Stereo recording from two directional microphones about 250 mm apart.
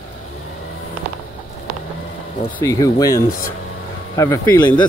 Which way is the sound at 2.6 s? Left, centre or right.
Centre.